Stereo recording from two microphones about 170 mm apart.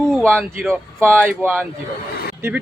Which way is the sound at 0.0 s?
5° left (ahead or behind).